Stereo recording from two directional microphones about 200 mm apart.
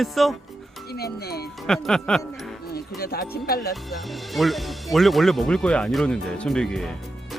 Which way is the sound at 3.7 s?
Centre (ahead or behind).